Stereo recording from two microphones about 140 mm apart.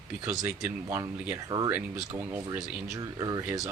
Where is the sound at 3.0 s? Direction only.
25° right (ahead or behind).